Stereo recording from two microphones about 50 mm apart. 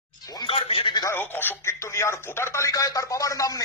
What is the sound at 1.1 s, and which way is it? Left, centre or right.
Speech, left.